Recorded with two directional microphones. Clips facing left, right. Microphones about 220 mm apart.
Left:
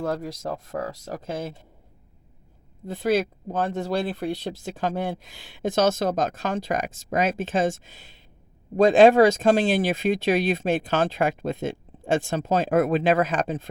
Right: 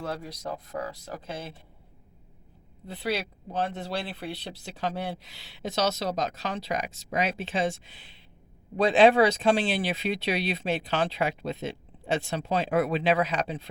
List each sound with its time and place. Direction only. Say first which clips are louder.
0.0 s speech: left 6 dB; 45° left (ahead or behind)
2.8 s speech: left 8 dB; 45° left (ahead or behind)